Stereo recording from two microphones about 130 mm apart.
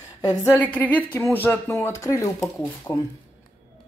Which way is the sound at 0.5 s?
10° left (ahead or behind).